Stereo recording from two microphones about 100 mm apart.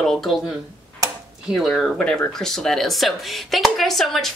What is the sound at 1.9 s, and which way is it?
Speech, 10° left (ahead or behind).